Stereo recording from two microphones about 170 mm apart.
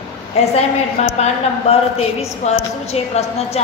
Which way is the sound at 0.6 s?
40° left (ahead or behind).